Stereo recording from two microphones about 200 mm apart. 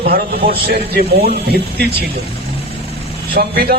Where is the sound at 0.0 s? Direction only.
50° right (ahead or behind).